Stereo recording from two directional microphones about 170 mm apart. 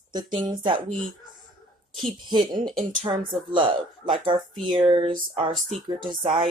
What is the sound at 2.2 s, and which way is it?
Speech, 25° right (ahead or behind).